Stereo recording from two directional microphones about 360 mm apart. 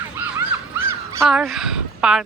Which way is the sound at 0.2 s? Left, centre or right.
Centre.